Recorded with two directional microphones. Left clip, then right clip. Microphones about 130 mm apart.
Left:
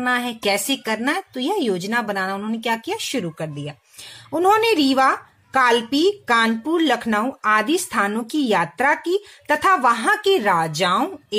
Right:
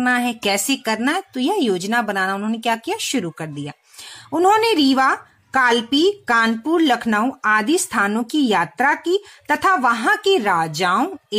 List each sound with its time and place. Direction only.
0.0 s speech: 40° right (ahead or behind)